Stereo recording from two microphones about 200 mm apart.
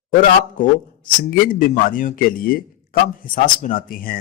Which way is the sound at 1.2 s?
45° left (ahead or behind).